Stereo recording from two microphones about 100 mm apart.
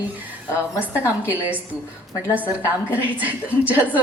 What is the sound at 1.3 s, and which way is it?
A woman's voice, 15° right (ahead or behind).